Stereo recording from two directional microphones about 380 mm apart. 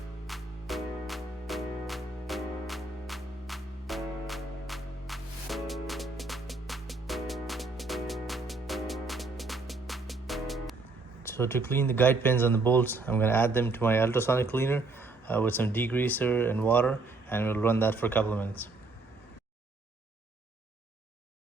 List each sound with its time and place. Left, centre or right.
0.3 s music: centre
11.2 s speech: centre